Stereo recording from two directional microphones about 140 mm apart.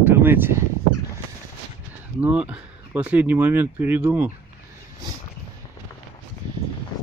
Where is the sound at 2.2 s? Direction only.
10° right (ahead or behind).